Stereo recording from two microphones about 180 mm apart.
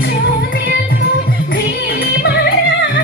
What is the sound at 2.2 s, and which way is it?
Music, 60° left (ahead or behind).